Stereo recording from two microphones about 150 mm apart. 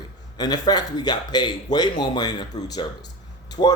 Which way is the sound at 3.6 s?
40° left (ahead or behind).